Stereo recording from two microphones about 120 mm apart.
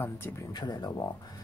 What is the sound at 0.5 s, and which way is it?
Speech, 35° left (ahead or behind).